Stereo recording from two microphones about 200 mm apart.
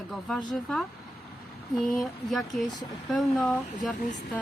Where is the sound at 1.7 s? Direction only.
Centre (ahead or behind).